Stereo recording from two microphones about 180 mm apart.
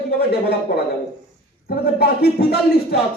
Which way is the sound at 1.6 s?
60° left (ahead or behind).